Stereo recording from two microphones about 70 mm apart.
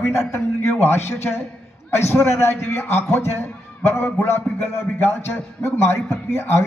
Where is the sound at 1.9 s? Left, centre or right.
Left.